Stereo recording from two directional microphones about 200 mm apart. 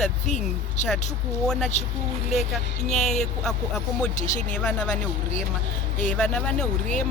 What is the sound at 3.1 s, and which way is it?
Speech, centre (ahead or behind).